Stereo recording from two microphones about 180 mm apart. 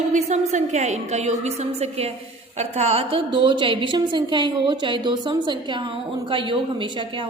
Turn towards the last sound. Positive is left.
turn(degrees=-25)  # may be behind; listen again after turning